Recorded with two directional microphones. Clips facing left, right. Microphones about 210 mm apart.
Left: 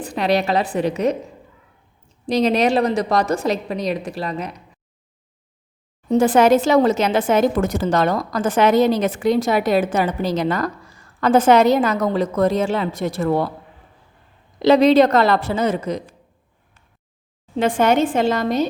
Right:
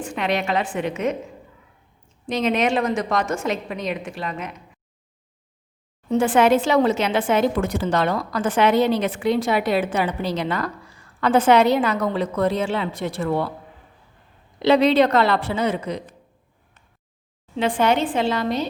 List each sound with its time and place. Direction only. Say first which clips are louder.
0.0 s a woman's voice: left 4 dB; 35° left (ahead or behind)
2.2 s a woman's voice: left 4 dB; 35° left (ahead or behind)
6.1 s speech: left 3 dB; 40° left (ahead or behind)
14.6 s speech: left 4 dB; 40° left (ahead or behind)
17.6 s speech: left 3 dB; 45° left (ahead or behind)